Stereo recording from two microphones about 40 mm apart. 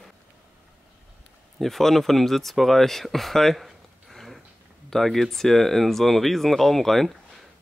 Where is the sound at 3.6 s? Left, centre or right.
Centre.